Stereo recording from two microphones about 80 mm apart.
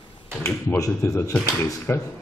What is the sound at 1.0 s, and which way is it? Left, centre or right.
Speech, left.